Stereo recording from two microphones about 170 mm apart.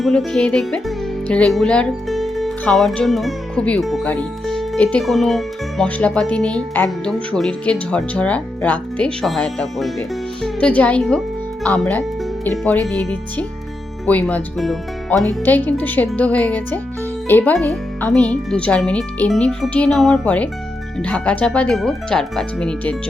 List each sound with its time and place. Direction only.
0.0 s speech: centre (ahead or behind)